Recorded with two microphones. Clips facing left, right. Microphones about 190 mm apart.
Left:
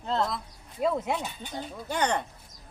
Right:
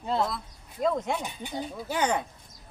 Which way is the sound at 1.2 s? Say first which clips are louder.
Right 2 dB; 15° right (ahead or behind).